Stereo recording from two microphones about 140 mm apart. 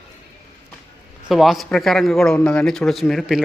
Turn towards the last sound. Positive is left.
turn(degrees=0)  # may be behind; listen again after turning